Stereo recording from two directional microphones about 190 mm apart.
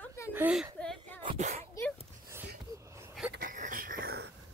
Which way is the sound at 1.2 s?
35° right (ahead or behind).